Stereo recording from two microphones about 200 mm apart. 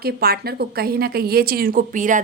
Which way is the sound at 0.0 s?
50° right (ahead or behind).